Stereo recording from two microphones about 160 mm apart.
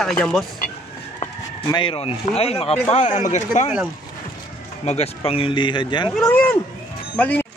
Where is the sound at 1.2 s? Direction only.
25° left (ahead or behind); by 3.7 s 50° left (ahead or behind).